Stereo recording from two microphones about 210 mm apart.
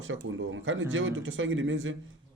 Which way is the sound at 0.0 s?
65° right (ahead or behind).